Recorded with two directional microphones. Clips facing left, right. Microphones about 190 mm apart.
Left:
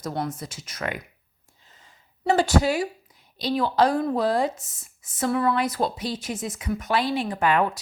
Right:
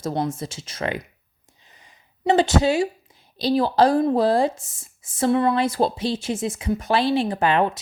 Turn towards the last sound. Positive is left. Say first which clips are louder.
# right 2 dB
turn(degrees=-25)  # may be behind; listen again after turning